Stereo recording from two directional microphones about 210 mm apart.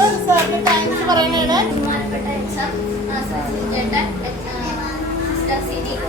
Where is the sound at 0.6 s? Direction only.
20° right (ahead or behind).